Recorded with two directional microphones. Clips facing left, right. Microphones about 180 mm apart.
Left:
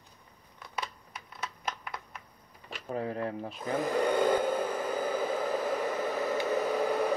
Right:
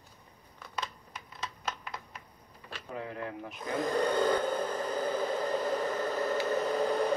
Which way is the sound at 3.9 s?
10° left (ahead or behind).